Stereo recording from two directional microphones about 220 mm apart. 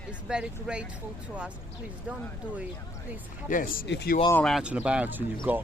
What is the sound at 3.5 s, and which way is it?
Speech, 40° left (ahead or behind).